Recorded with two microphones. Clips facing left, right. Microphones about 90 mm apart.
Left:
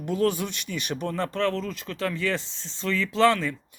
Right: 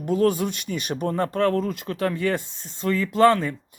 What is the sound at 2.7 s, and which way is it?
Speech, 45° right (ahead or behind).